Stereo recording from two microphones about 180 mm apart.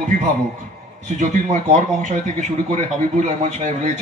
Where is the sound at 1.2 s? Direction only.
45° right (ahead or behind).